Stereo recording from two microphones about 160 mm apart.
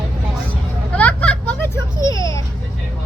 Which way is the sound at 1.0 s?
10° left (ahead or behind).